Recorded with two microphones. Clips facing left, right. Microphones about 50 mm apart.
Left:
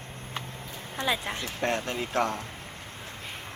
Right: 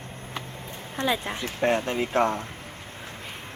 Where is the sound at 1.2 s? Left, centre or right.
Centre.